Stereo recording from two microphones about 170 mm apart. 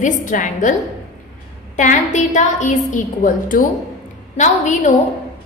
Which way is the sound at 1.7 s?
45° left (ahead or behind).